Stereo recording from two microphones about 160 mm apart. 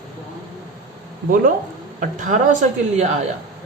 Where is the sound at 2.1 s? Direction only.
50° right (ahead or behind).